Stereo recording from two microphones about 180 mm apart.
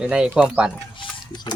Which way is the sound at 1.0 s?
25° left (ahead or behind).